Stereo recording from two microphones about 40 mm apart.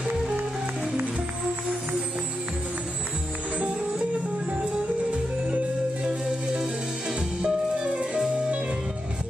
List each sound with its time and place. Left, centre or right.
3.5 s music: right
7.4 s music: right